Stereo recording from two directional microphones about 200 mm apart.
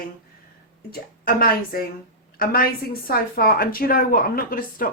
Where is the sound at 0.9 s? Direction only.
50° left (ahead or behind).